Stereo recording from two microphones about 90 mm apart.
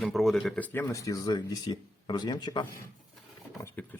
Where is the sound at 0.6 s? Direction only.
20° left (ahead or behind).